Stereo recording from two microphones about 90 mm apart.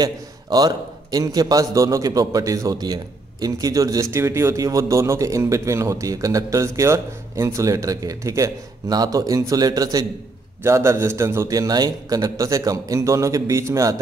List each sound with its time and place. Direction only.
0.0 s a man's voice: 45° right (ahead or behind)
10.6 s a man's voice: 30° right (ahead or behind)
11.5 s a man's voice: 45° right (ahead or behind)